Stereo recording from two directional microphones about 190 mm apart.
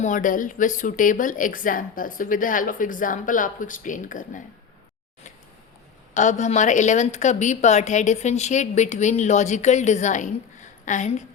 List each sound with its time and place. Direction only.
0.0 s a woman's voice: 45° left (ahead or behind)
6.1 s a woman's voice: 40° left (ahead or behind)